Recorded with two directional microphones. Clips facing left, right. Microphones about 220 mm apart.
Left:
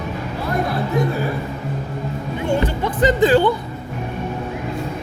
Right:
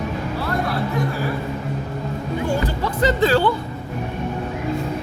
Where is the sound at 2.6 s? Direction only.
20° left (ahead or behind).